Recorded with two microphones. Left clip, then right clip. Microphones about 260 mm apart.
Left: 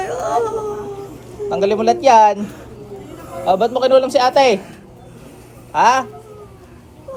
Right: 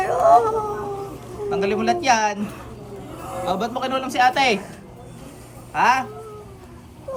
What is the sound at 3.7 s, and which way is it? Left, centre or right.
Speech, centre.